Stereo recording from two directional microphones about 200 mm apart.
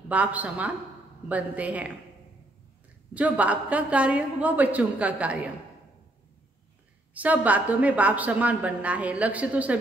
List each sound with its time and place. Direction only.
0.1 s a woman's voice: 5° right (ahead or behind)
3.2 s a woman's voice: 5° right (ahead or behind)
7.2 s a woman's voice: 5° right (ahead or behind)